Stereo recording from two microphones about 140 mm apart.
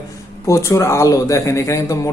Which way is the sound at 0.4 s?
20° left (ahead or behind).